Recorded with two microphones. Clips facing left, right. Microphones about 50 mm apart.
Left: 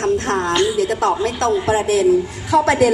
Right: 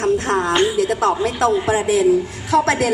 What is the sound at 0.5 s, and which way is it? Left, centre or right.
Music, right.